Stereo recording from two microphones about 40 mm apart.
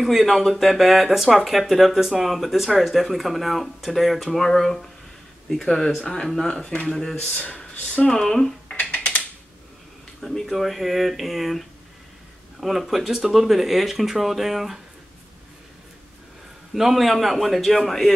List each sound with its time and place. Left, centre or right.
0.0 s speech: centre
7.5 s a sound: left
8.2 s speech: centre
10.4 s speech: centre
16.7 s speech: centre